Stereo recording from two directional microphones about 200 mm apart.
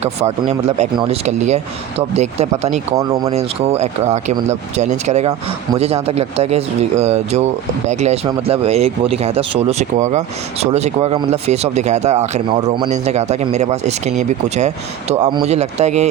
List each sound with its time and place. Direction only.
0.0 s speech: 30° right (ahead or behind)
3.0 s speech: 20° right (ahead or behind)
3.3 s speech: 30° right (ahead or behind)